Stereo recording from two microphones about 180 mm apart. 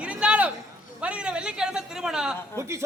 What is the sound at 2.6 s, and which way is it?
Speech, 15° right (ahead or behind).